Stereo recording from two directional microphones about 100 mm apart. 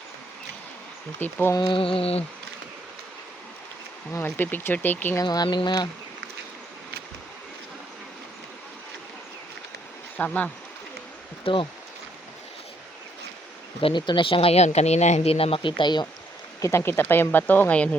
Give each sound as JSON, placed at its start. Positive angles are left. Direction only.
{"t": 1.2, "sound": "speech", "side_deg": 20}
{"t": 1.5, "sound": "speech", "side_deg": 55}
{"t": 4.1, "sound": "speech", "side_deg": 20}
{"t": 5.2, "sound": "speech", "side_deg": 45}
{"t": 10.2, "sound": "speech", "side_deg": 15}
{"t": 11.4, "sound": "speech", "side_deg": 60}
{"t": 13.8, "sound": "speech", "side_deg": 55}
{"t": 16.6, "sound": "speech", "side_deg": 30}